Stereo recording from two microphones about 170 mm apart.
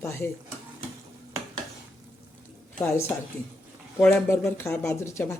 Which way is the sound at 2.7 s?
15° left (ahead or behind).